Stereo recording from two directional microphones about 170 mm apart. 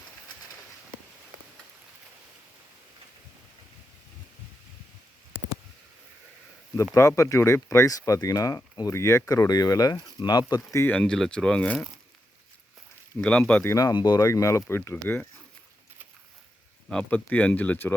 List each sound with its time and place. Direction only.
7.2 s speech: 15° left (ahead or behind)
13.2 s speech: 5° left (ahead or behind)
13.7 s speech: 20° left (ahead or behind)
16.9 s speech: 5° left (ahead or behind)